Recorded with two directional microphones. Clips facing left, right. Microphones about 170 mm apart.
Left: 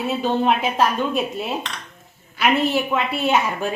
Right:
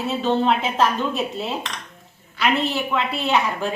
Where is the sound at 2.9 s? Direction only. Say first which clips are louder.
Left 1 dB; 20° left (ahead or behind).